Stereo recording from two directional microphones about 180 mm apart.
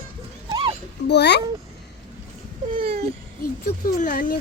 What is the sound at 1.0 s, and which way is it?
Speech, 70° left (ahead or behind).